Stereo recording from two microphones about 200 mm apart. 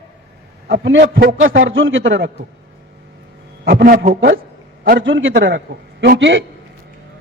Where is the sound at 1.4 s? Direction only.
75° right (ahead or behind).